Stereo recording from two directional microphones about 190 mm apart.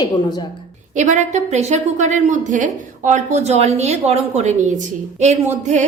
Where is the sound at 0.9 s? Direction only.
40° right (ahead or behind).